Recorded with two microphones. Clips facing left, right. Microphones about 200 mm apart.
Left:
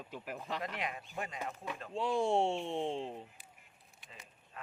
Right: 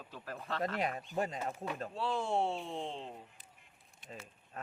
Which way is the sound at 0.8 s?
40° right (ahead or behind).